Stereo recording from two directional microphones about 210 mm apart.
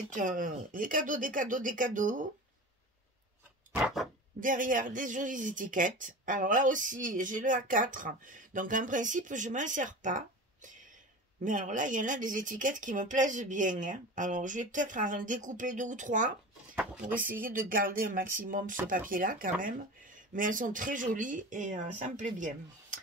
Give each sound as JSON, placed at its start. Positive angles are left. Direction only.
{"t": 0.1, "sound": "speech", "side_deg": -40}
{"t": 3.7, "sound": "a sound", "side_deg": -5}
{"t": 4.4, "sound": "speech", "side_deg": -40}